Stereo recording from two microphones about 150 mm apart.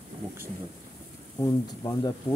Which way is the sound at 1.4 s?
25° left (ahead or behind).